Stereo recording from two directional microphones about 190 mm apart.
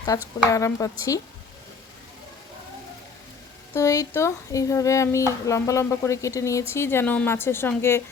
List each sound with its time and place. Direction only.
0.0 s speech: 15° left (ahead or behind)
3.8 s speech: 15° left (ahead or behind)